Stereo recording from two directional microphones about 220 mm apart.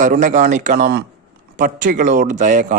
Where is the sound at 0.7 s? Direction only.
50° right (ahead or behind).